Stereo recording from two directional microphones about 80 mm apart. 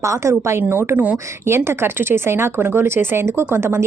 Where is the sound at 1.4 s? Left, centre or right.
Right.